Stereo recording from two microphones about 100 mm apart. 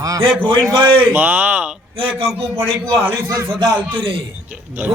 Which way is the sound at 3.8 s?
60° right (ahead or behind).